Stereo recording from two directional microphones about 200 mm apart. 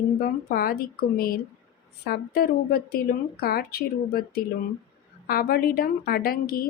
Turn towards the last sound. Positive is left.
turn(degrees=45)  # may be behind; listen again after turning